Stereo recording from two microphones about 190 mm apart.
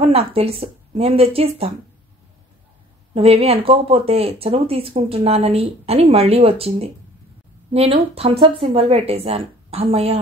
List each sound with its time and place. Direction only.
0.0 s speech: 30° right (ahead or behind)
3.2 s speech: 30° right (ahead or behind)